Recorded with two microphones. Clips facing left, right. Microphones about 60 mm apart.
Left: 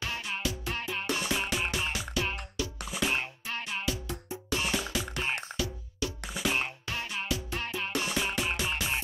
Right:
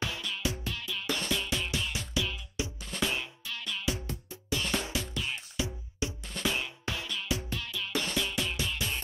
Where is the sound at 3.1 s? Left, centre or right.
Left.